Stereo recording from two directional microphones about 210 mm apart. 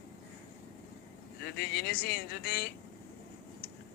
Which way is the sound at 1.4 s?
50° left (ahead or behind).